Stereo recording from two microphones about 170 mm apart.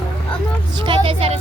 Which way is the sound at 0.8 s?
30° right (ahead or behind).